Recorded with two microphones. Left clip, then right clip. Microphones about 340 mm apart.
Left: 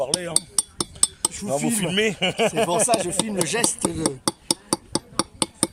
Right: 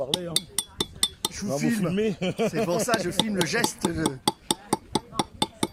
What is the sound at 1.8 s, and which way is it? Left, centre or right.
Speech, left.